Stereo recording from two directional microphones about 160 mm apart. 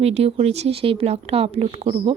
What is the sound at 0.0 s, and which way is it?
Speech, 40° right (ahead or behind).